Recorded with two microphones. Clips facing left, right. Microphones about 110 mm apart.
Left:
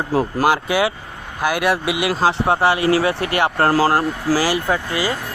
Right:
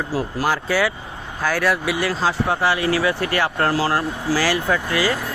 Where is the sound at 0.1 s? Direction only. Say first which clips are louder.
Left 5 dB; 55° left (ahead or behind).